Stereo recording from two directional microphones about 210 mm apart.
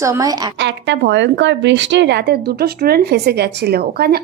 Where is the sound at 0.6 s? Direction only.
55° right (ahead or behind).